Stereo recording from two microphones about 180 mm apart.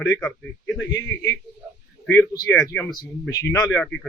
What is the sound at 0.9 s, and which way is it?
A man's voice, 20° left (ahead or behind).